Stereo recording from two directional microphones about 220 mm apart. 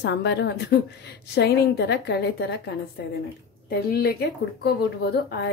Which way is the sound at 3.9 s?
45° left (ahead or behind).